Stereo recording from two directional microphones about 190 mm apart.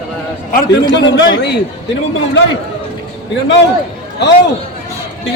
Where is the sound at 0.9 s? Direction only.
70° left (ahead or behind).